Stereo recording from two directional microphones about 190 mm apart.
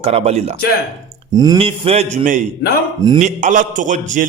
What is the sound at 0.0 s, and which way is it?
A man's voice, 30° right (ahead or behind).